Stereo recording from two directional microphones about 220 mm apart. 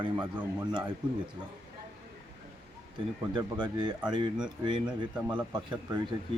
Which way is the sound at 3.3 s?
20° right (ahead or behind).